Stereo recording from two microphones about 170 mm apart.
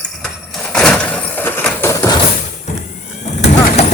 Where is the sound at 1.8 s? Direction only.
15° left (ahead or behind).